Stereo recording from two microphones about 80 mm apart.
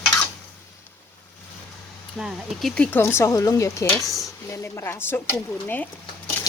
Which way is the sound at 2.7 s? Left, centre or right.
Centre.